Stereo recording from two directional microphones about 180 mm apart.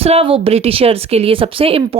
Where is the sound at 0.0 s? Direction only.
35° right (ahead or behind).